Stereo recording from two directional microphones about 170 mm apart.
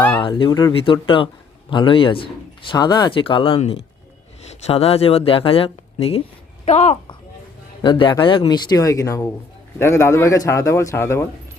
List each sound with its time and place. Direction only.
0.2 s a woman's voice: 30° left (ahead or behind)